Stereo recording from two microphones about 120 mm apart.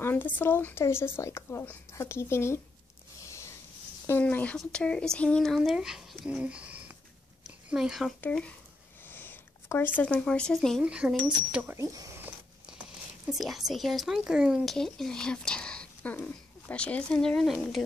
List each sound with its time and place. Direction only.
0.0 s speech: 20° left (ahead or behind)
4.1 s speech: 15° left (ahead or behind); by 7.0 s 10° right (ahead or behind)
7.4 s a sound: 5° right (ahead or behind)
8.2 s speech: 10° left (ahead or behind)
9.0 s a sound: 15° left (ahead or behind)
10.8 s speech: 10° right (ahead or behind)
11.7 s speech: 30° right (ahead or behind)
13.3 s speech: centre (ahead or behind)